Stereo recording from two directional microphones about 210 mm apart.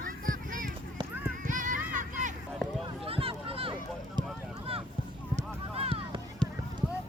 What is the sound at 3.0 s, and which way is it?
Run, 25° right (ahead or behind).